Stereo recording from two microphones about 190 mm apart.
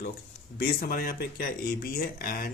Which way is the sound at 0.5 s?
50° left (ahead or behind).